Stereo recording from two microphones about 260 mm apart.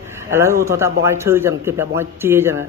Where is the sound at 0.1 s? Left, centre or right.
Centre.